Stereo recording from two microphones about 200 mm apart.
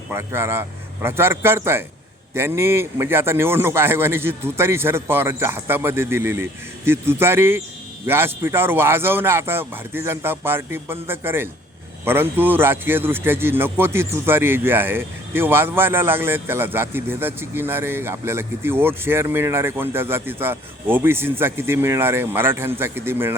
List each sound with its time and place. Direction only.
0.1 s speech: 10° right (ahead or behind)